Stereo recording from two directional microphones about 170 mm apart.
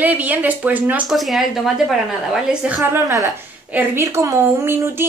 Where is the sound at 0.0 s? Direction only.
10° right (ahead or behind).